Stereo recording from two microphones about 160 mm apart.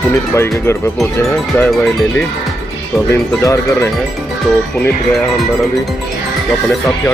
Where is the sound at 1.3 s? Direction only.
5° left (ahead or behind).